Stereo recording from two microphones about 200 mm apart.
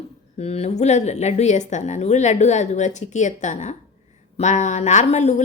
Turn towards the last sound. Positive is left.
turn(degrees=35)  # may be behind; listen again after turning